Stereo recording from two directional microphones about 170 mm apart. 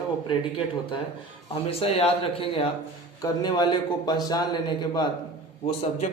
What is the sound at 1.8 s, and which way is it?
A man's voice, 35° left (ahead or behind).